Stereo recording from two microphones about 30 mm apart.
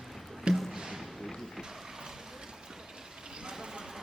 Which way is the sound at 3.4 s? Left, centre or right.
Right.